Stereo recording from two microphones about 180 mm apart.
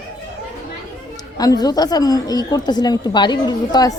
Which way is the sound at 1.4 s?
20° left (ahead or behind).